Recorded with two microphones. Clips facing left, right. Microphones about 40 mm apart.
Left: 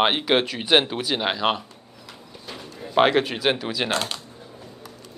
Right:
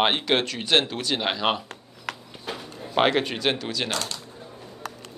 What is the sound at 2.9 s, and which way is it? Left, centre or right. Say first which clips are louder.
Speech: left 3 dB; centre.